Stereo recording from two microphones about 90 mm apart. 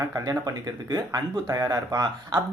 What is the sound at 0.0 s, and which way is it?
Speech, 40° right (ahead or behind).